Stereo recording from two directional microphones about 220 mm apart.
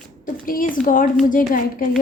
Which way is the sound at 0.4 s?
40° left (ahead or behind).